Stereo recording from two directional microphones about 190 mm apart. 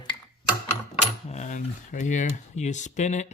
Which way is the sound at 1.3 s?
40° left (ahead or behind).